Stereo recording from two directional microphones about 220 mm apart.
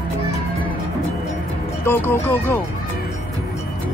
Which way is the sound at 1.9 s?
10° left (ahead or behind).